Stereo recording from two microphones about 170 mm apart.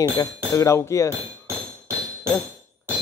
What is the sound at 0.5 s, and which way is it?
Speech, 15° left (ahead or behind).